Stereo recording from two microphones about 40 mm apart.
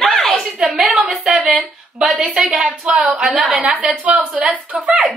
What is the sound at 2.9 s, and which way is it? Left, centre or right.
Speech, right.